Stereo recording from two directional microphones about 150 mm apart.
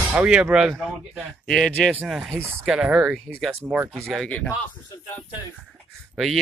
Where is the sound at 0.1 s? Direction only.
5° right (ahead or behind).